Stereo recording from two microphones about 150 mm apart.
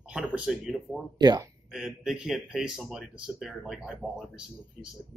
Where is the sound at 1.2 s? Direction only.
25° right (ahead or behind).